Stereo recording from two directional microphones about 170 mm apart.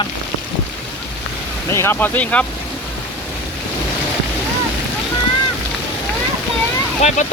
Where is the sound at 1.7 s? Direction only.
15° left (ahead or behind).